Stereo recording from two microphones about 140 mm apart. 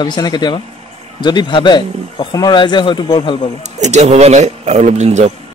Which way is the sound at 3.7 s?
55° right (ahead or behind).